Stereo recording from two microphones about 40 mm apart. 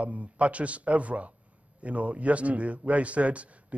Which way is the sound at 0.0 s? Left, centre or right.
Right.